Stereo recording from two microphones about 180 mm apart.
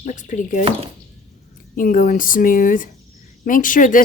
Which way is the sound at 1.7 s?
50° left (ahead or behind).